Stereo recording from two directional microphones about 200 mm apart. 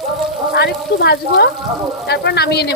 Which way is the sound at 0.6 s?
55° left (ahead or behind).